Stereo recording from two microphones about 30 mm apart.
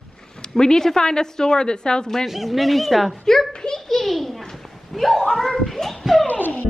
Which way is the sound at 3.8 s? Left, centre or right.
Centre.